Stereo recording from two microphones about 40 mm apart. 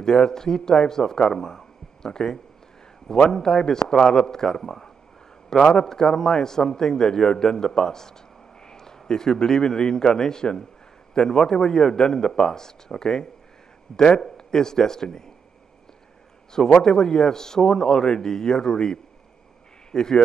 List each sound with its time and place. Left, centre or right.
0.0 s a man's voice: centre
16.8 s a man's voice: centre